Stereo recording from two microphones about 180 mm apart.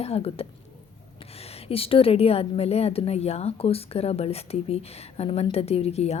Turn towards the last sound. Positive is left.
turn(degrees=35)  # may be behind; listen again after turning